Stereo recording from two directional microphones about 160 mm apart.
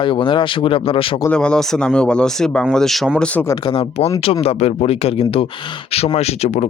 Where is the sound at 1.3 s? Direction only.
5° left (ahead or behind).